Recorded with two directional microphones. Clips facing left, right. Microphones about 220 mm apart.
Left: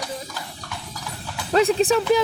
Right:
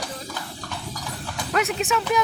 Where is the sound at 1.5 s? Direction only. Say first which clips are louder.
Left 7 dB; 30° left (ahead or behind).